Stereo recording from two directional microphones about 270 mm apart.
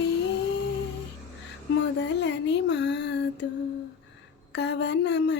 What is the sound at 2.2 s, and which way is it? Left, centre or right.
Mantra, left.